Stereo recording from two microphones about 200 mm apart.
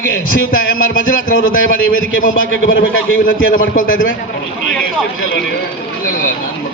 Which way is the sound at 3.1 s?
45° left (ahead or behind).